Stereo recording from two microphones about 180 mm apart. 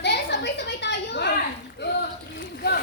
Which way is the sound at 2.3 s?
60° left (ahead or behind).